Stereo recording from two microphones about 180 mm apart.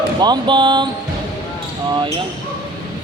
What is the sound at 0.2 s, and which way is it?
Speech, 25° right (ahead or behind).